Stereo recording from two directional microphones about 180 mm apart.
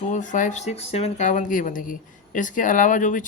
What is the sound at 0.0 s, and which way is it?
Speech, 45° left (ahead or behind).